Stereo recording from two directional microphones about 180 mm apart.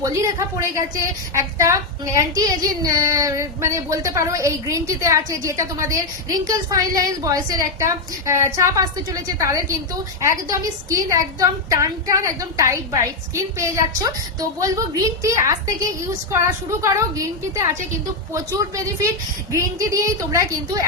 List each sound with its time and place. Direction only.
0.0 s child singing: 15° right (ahead or behind)